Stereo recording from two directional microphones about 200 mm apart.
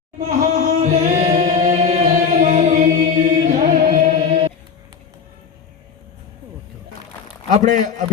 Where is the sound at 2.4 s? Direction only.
35° right (ahead or behind).